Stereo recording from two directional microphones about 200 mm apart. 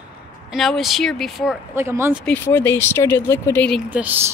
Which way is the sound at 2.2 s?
10° left (ahead or behind).